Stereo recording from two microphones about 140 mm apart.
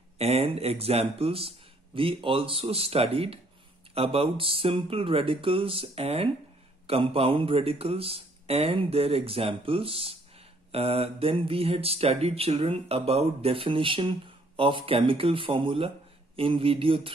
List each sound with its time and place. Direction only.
0.2 s speech: 45° right (ahead or behind)